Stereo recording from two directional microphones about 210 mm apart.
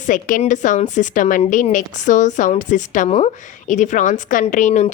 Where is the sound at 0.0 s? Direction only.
40° left (ahead or behind).